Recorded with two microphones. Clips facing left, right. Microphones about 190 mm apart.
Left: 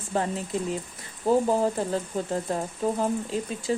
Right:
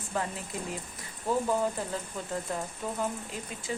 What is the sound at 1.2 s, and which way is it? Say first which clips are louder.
Speech: left 6 dB; 35° left (ahead or behind).